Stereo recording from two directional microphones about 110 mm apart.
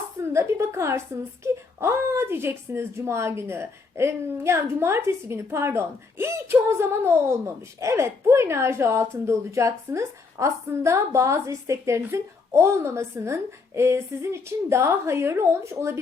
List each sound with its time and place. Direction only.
0.3 s a woman's voice: 25° right (ahead or behind)